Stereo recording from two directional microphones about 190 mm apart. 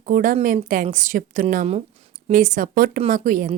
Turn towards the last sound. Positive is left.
turn(degrees=-45)  # may be behind; listen again after turning